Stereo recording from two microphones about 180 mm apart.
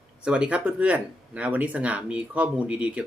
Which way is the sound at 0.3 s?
5° right (ahead or behind).